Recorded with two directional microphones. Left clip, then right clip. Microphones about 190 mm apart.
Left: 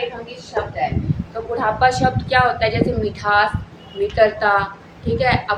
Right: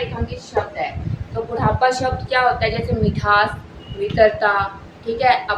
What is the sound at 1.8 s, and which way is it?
A woman's voice, 25° left (ahead or behind).